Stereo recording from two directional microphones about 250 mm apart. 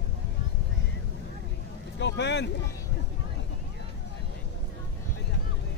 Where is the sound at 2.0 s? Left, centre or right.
Left.